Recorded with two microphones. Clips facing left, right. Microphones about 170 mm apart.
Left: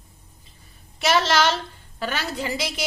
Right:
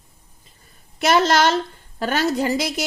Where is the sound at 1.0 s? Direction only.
50° right (ahead or behind).